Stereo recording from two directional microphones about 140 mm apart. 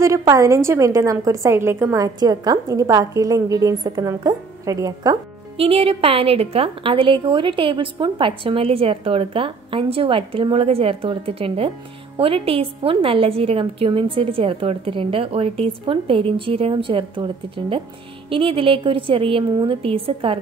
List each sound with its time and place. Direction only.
0.2 s a woman's voice: 25° right (ahead or behind)
5.6 s a woman's voice: 45° right (ahead or behind)